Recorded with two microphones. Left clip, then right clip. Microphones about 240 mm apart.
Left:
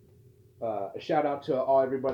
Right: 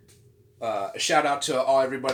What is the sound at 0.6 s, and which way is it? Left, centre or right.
Speech, right.